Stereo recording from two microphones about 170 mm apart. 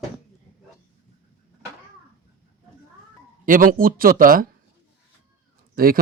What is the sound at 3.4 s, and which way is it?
Speech, 55° right (ahead or behind).